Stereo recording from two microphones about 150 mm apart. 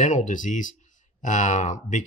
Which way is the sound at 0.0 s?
55° left (ahead or behind).